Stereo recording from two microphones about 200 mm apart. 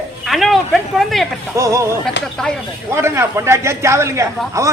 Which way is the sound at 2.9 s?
15° right (ahead or behind).